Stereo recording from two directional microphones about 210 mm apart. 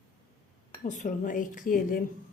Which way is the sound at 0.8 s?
35° left (ahead or behind).